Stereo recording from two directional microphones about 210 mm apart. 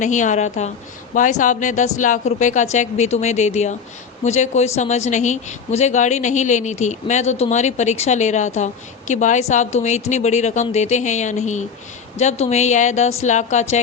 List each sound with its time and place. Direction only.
0.0 s speech: 35° left (ahead or behind)